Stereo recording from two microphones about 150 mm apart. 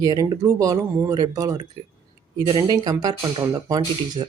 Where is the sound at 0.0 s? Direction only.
25° right (ahead or behind).